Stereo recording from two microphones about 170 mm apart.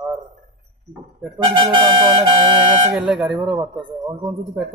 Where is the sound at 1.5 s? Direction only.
25° right (ahead or behind).